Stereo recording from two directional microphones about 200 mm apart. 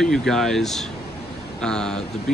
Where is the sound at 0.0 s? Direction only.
Centre (ahead or behind).